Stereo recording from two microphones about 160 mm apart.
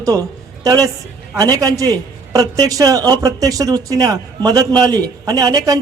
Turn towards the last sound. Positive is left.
turn(degrees=-25)  # may be behind; listen again after turning